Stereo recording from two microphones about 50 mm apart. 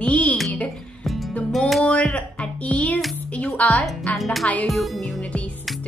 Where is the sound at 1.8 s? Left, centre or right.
Left.